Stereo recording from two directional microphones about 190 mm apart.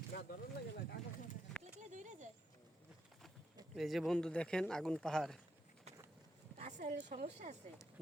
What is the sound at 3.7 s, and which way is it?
Speech, centre (ahead or behind).